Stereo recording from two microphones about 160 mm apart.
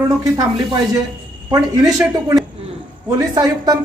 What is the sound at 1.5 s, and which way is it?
A woman's voice, 20° right (ahead or behind).